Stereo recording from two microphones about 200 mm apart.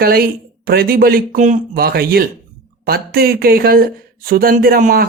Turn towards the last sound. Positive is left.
turn(degrees=-45)  # may be behind; listen again after turning